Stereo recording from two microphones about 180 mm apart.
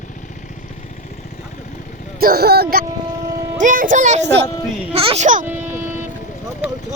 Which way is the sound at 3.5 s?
45° right (ahead or behind).